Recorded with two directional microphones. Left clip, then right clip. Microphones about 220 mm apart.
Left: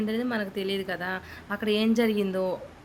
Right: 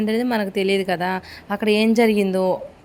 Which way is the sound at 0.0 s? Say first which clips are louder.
Right 8 dB; 30° right (ahead or behind).